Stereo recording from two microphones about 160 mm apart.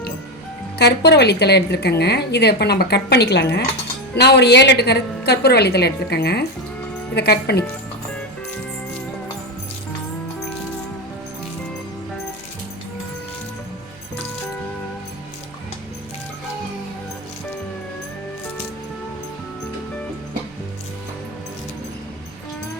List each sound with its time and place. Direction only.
0.8 s speech: 90° left